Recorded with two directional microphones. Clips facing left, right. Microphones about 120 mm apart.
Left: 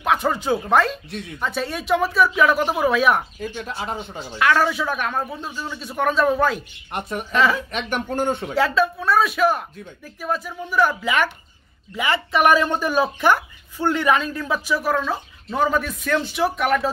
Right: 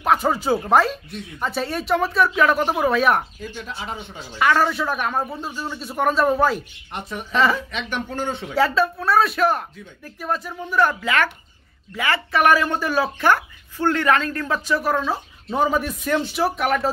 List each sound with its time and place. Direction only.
0.0 s speech: 5° right (ahead or behind)
3.3 s speech: 50° left (ahead or behind)
4.4 s speech: centre (ahead or behind)
6.9 s speech: 50° left (ahead or behind)
7.3 s speech: centre (ahead or behind)
7.7 s speech: 50° left (ahead or behind)
8.5 s speech: centre (ahead or behind)
11.0 s speech: 15° left (ahead or behind); by 15.1 s centre (ahead or behind)
15.5 s a man's voice: 10° right (ahead or behind)